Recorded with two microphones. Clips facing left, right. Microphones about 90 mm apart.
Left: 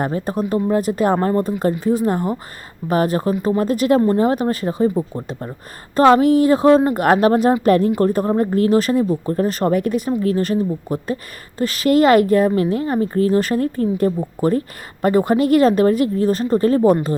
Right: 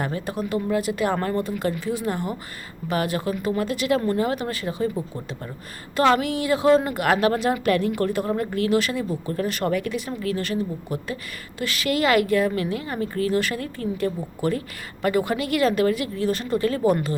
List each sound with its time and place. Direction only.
0.0 s a woman's voice: 40° left (ahead or behind)
1.1 s a woman's voice: 25° left (ahead or behind)
1.4 s a woman's voice: 40° left (ahead or behind)
6.1 s a woman's voice: 40° left (ahead or behind)